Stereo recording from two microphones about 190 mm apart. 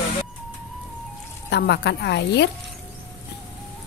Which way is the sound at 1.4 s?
65° left (ahead or behind).